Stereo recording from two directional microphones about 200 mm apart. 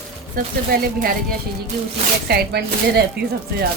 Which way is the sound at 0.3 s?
45° right (ahead or behind).